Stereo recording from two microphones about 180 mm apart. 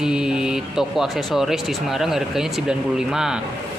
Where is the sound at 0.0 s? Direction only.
5° right (ahead or behind).